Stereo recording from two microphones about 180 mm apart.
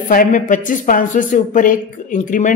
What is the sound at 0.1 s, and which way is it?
Speech, 50° left (ahead or behind).